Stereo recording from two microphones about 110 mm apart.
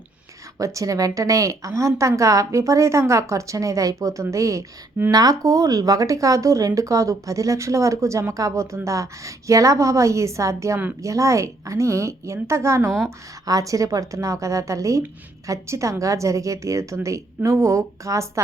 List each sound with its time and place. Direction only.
0.6 s speech: 30° right (ahead or behind)